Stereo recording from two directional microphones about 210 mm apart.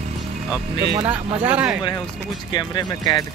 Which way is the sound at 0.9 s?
10° right (ahead or behind).